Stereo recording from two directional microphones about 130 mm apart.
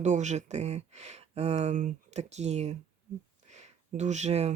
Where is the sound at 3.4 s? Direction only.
60° right (ahead or behind).